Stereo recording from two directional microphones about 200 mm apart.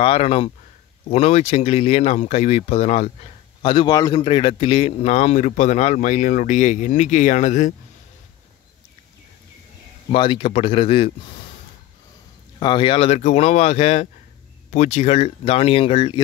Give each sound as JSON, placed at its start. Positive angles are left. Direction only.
{"t": 0.0, "sound": "a man's voice", "side_deg": 30}
{"t": 10.1, "sound": "speech", "side_deg": 25}
{"t": 12.5, "sound": "a man's voice", "side_deg": 25}